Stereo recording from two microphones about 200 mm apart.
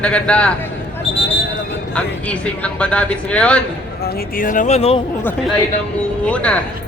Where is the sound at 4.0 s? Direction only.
50° left (ahead or behind); by 5.0 s 30° left (ahead or behind).